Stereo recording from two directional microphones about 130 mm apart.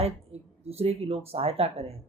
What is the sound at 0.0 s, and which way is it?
Speech, 50° right (ahead or behind).